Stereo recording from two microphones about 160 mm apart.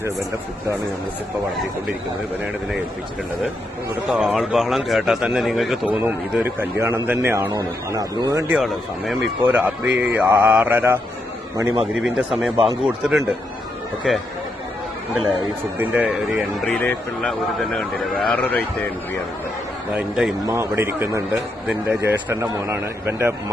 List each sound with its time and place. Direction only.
4.1 s a man's voice: centre (ahead or behind)
6.0 s a man's voice: 15° right (ahead or behind)
8.4 s a man's voice: 5° right (ahead or behind); by 11.8 s 20° right (ahead or behind)
12.0 s a man's voice: 5° right (ahead or behind)
15.8 s a man's voice: 10° right (ahead or behind)
16.6 s a man's voice: 10° left (ahead or behind)
20.0 s a man's voice: centre (ahead or behind)
20.5 s a man's voice: 15° right (ahead or behind)